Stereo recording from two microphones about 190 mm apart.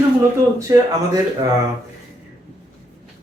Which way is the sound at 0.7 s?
15° right (ahead or behind).